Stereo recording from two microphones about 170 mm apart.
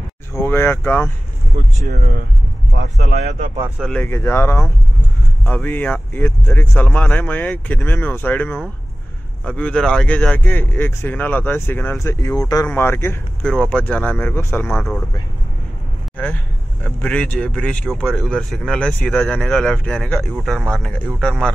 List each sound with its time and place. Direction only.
0.3 s speech: 15° left (ahead or behind)
1.5 s speech: 30° right (ahead or behind)
1.9 s speech: 60° right (ahead or behind)
3.3 s a man's voice: 45° right (ahead or behind)
3.6 s speech: 5° right (ahead or behind)
3.9 s speech: 15° left (ahead or behind)
14.7 s speech: 5° left (ahead or behind)
16.2 s speech: 10° left (ahead or behind)